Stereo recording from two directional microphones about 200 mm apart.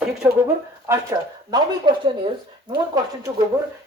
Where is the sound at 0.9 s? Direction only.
15° right (ahead or behind).